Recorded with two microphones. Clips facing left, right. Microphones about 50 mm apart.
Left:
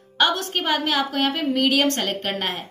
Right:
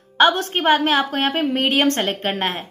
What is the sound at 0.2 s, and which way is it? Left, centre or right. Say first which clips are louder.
A woman's voice: right 5 dB; right.